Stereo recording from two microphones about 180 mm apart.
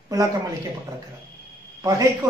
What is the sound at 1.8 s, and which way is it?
Speech, 20° right (ahead or behind).